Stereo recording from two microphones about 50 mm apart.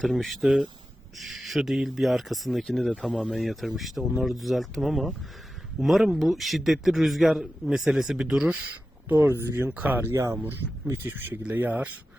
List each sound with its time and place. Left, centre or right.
0.0 s a man's voice: centre
9.2 s speech: right
9.6 s speech: right
10.1 s speech: right
10.9 s speech: right
11.5 s speech: right